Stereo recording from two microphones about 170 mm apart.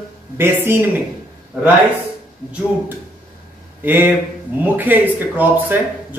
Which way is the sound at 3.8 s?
10° right (ahead or behind).